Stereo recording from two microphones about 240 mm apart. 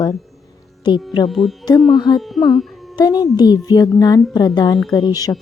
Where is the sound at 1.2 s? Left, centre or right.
Centre.